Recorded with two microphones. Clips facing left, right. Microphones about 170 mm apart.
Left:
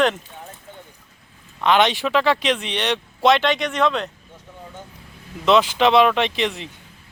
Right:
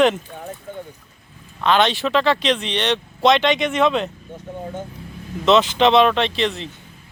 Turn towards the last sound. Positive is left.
turn(degrees=15)  # may be behind; listen again after turning